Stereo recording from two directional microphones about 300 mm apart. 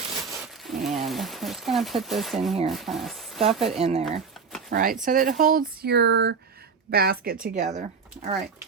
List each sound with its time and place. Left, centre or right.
0.4 s speech: centre
3.8 s speech: centre